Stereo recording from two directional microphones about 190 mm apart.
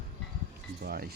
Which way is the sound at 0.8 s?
55° right (ahead or behind).